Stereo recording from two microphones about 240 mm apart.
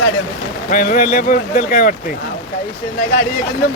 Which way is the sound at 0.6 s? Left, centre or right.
Left.